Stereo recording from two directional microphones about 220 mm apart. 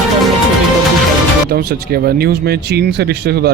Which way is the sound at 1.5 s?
45° right (ahead or behind).